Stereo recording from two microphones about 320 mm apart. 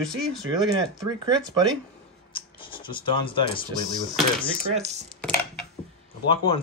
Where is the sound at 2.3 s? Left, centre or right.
Centre.